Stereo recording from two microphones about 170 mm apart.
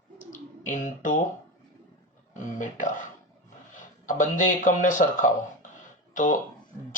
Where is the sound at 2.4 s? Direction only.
50° left (ahead or behind).